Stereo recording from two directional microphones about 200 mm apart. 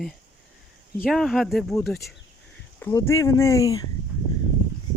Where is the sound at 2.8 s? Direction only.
15° left (ahead or behind).